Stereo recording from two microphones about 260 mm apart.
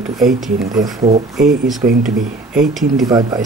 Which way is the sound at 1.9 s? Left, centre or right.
Right.